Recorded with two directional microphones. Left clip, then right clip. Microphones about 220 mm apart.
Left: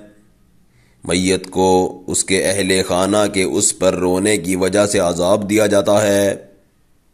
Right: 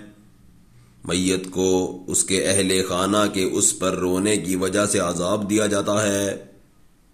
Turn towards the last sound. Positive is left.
turn(degrees=30)  # may be behind; listen again after turning